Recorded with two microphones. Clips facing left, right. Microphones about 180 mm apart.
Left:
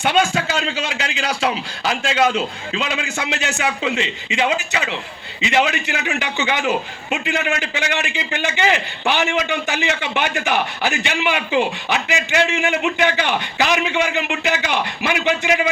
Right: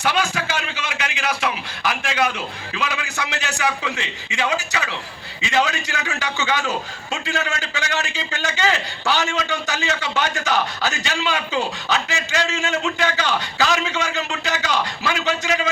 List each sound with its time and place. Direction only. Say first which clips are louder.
0.0 s a man's voice: left 4 dB; 25° left (ahead or behind)